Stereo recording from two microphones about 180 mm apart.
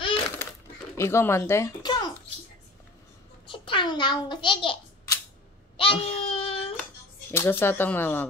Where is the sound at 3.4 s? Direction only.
30° left (ahead or behind).